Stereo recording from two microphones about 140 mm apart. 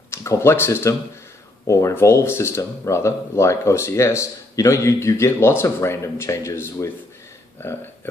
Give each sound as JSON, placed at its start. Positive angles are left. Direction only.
{"t": 0.1, "sound": "speech", "side_deg": 20}